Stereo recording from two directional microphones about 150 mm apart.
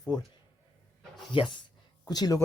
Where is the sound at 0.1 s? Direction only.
25° left (ahead or behind).